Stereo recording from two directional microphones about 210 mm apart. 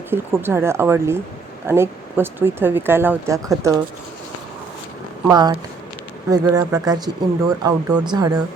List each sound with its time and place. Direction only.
0.1 s speech: 10° right (ahead or behind)
5.3 s speech: 20° right (ahead or behind)